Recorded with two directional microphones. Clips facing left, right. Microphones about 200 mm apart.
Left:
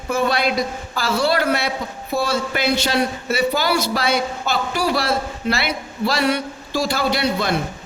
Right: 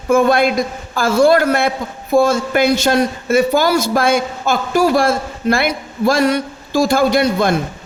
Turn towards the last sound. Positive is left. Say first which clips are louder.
# right 6 dB
turn(degrees=-45)  # may be behind; listen again after turning